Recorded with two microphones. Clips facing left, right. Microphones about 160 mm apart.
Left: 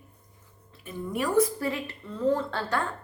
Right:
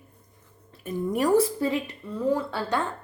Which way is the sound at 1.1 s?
40° right (ahead or behind).